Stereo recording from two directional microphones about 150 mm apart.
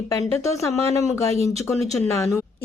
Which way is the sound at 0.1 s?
20° left (ahead or behind).